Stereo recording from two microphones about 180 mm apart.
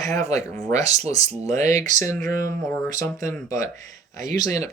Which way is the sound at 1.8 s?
15° left (ahead or behind).